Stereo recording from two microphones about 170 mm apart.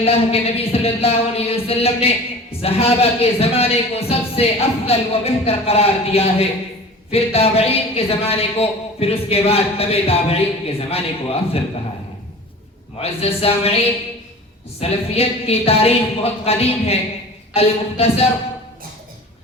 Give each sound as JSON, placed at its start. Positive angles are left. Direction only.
{"t": 0.0, "sound": "speech", "side_deg": 35}
{"t": 13.0, "sound": "speech", "side_deg": 35}